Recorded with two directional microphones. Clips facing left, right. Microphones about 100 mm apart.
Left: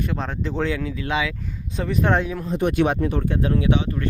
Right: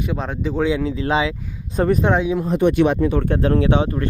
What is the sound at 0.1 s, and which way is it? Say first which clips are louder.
Speech: right 3 dB; 5° right (ahead or behind).